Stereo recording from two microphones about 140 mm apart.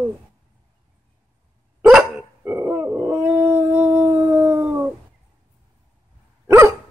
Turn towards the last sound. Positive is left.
turn(degrees=-20)  # may be behind; listen again after turning